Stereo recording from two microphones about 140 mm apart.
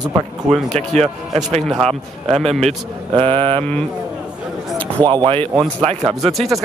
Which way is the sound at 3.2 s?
40° right (ahead or behind).